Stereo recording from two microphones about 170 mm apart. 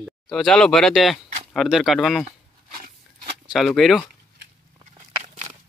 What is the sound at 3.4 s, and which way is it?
Speech, centre (ahead or behind).